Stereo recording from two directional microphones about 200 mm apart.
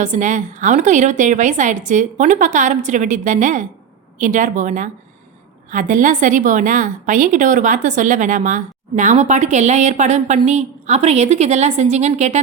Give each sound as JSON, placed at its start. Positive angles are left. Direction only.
{"t": 0.0, "sound": "a woman's voice", "side_deg": -35}